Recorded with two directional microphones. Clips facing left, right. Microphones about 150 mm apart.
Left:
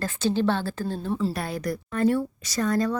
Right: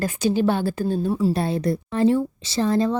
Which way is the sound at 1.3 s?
25° right (ahead or behind).